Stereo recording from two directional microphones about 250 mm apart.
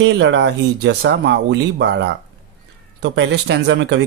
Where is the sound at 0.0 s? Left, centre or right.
Right.